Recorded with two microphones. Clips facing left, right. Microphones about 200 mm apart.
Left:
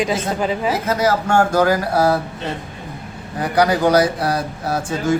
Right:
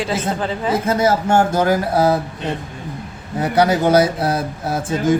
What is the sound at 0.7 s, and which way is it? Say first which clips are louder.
Speech: right 2 dB; 30° right (ahead or behind).